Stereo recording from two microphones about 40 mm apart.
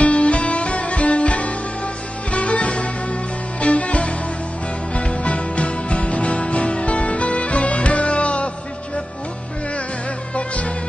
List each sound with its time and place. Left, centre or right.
0.0 s music: left
10.3 s music: left